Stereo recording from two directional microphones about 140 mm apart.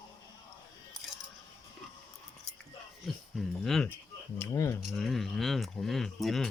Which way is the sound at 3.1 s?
Centre (ahead or behind).